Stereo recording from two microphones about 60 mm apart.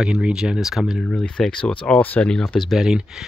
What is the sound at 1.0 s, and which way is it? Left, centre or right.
Speech, centre.